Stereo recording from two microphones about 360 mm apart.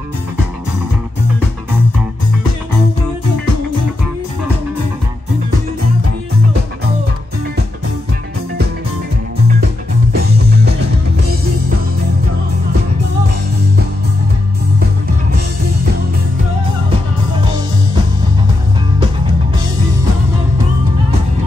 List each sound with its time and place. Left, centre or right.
10.1 s music: right